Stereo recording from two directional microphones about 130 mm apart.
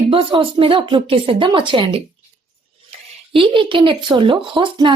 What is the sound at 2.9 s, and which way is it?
Speech, 40° right (ahead or behind).